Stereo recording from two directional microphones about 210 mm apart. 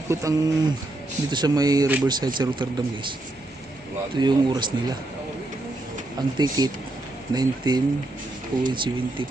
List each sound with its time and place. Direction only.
0.1 s speech: 15° right (ahead or behind)
4.1 s speech: 20° right (ahead or behind)
6.1 s speech: 20° right (ahead or behind)